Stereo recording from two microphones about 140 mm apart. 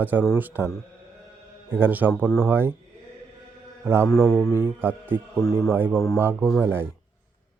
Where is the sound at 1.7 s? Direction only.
15° right (ahead or behind).